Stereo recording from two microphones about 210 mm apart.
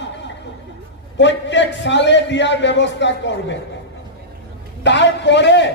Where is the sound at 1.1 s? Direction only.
60° left (ahead or behind).